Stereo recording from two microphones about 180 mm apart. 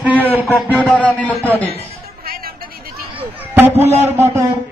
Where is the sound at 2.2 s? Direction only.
55° right (ahead or behind).